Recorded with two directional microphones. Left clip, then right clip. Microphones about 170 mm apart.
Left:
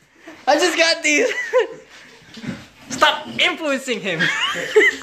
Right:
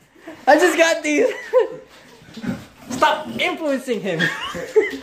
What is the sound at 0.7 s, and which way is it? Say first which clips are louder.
Speech: even; 15° right (ahead or behind).